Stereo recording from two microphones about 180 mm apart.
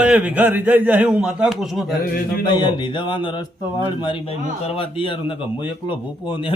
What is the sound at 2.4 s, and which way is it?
A man's voice, 25° left (ahead or behind).